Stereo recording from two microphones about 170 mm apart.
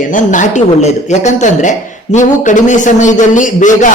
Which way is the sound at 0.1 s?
50° left (ahead or behind).